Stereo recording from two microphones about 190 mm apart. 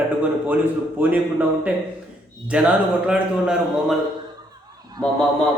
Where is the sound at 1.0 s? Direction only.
10° right (ahead or behind).